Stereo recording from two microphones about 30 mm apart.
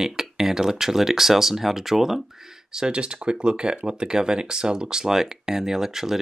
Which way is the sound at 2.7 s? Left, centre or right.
Right.